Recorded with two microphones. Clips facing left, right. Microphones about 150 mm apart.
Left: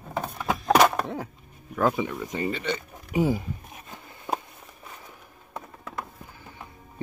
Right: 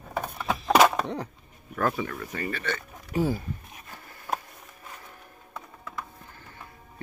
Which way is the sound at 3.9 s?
15° left (ahead or behind).